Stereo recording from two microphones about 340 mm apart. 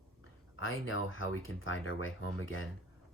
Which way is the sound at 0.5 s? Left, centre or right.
Left.